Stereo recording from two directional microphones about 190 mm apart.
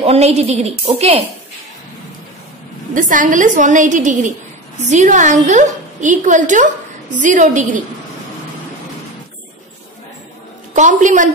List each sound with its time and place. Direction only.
0.0 s a woman's voice: 30° right (ahead or behind)
2.9 s a woman's voice: 45° right (ahead or behind)
10.7 s a woman's voice: 40° right (ahead or behind)